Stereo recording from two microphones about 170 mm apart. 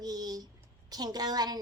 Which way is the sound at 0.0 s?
20° right (ahead or behind).